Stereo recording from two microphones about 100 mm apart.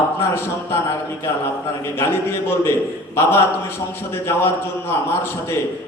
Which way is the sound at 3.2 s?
25° left (ahead or behind).